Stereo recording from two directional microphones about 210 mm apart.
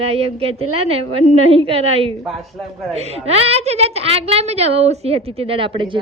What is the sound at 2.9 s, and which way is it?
A woman's voice, 30° right (ahead or behind).